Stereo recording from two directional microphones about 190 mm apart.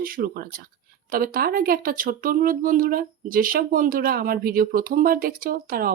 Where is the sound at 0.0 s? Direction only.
50° right (ahead or behind).